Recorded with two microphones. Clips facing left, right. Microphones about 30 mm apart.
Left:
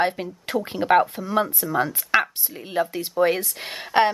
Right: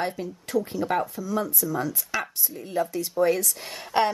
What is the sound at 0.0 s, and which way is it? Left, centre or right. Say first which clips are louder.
Speech: left 6 dB; left.